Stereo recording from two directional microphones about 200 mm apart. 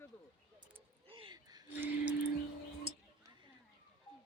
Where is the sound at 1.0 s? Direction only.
25° right (ahead or behind).